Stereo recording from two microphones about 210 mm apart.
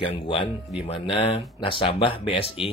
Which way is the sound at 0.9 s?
30° left (ahead or behind).